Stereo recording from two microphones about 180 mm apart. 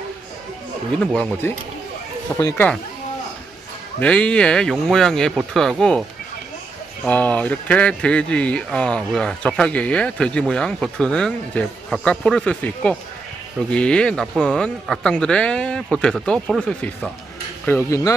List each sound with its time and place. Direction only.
0.9 s speech: 5° left (ahead or behind)
4.0 s speech: 5° left (ahead or behind)
7.1 s speech: 10° left (ahead or behind)